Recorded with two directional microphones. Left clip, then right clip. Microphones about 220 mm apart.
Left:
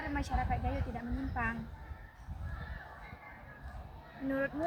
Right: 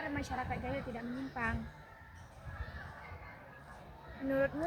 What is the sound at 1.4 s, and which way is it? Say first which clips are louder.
Speech: left 1 dB; 15° left (ahead or behind).